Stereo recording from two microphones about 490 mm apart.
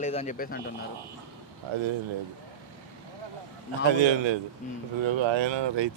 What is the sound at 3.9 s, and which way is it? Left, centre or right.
Speech, right.